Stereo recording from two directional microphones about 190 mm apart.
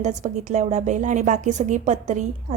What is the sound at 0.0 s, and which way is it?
A woman's voice, 40° right (ahead or behind).